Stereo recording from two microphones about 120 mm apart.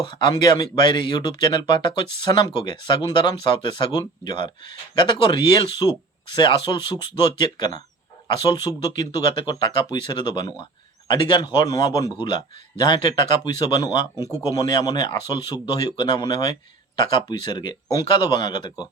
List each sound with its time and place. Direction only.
0.1 s a man's voice: 40° left (ahead or behind)